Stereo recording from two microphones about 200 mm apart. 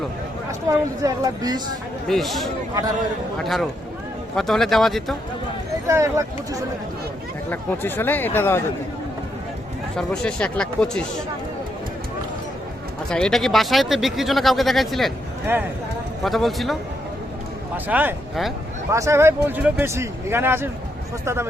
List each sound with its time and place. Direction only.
0.7 s speech: 15° right (ahead or behind)
2.0 s speech: centre (ahead or behind)
5.9 s speech: 15° right (ahead or behind)
7.5 s speech: 10° left (ahead or behind)
9.9 s speech: 5° left (ahead or behind)
13.1 s speech: 5° left (ahead or behind)
16.2 s speech: centre (ahead or behind)
17.8 s speech: 10° right (ahead or behind)